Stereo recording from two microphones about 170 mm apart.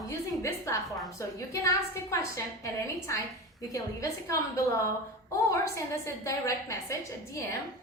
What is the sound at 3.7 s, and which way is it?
A woman's voice, 15° left (ahead or behind).